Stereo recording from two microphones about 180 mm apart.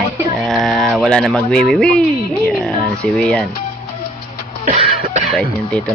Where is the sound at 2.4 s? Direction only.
Centre (ahead or behind).